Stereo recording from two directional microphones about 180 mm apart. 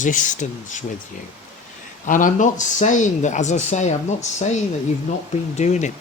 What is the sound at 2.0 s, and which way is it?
Speech, 45° left (ahead or behind).